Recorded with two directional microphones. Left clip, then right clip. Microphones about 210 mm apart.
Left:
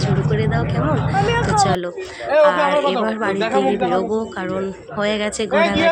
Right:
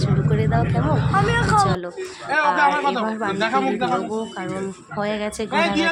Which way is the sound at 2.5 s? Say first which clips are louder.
Left 2 dB; 60° right (ahead or behind).